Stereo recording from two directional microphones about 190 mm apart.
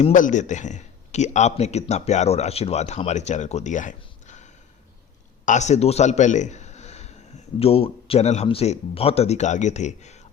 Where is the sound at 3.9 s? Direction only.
40° left (ahead or behind).